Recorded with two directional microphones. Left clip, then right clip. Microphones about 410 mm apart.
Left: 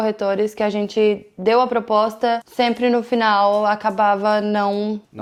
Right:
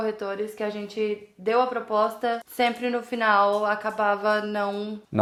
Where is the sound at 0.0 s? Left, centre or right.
Left.